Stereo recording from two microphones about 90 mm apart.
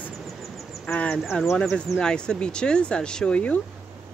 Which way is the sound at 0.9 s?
15° left (ahead or behind).